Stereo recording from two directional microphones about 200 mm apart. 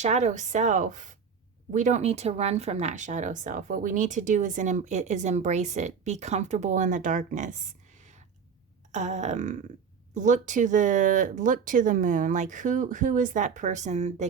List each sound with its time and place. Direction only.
0.0 s speech: 35° right (ahead or behind)